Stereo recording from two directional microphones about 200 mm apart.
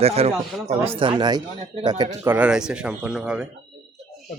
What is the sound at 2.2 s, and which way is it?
Speech, 5° right (ahead or behind).